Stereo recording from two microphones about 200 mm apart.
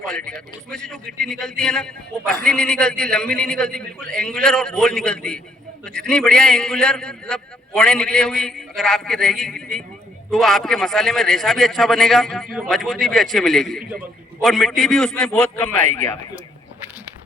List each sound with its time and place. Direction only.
0.1 s a man's voice: 5° left (ahead or behind)
15.9 s a man's voice: 35° right (ahead or behind)